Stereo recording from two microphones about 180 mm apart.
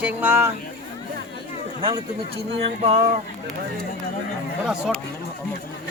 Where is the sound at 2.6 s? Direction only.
35° right (ahead or behind).